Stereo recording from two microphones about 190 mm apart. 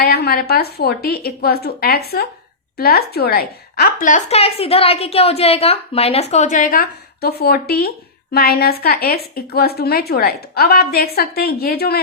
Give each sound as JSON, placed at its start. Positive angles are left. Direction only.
{"t": 0.0, "sound": "a woman's voice", "side_deg": 55}